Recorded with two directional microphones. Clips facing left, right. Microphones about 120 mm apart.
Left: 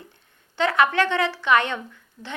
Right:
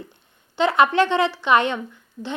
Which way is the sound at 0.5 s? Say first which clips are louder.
Right 3 dB; 20° right (ahead or behind).